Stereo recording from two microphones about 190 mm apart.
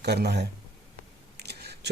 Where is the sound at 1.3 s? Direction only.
60° right (ahead or behind).